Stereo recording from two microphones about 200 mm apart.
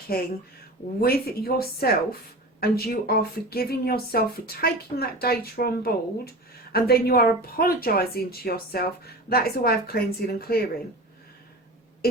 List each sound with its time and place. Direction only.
0.1 s speech: 50° left (ahead or behind)